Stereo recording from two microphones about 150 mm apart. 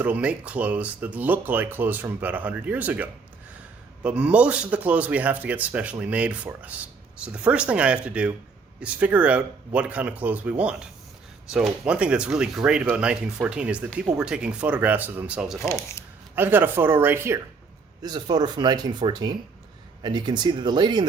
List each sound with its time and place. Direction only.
0.0 s speech: 10° right (ahead or behind)
15.6 s speech: 20° left (ahead or behind)
16.3 s speech: 15° right (ahead or behind)
18.0 s speech: 25° right (ahead or behind)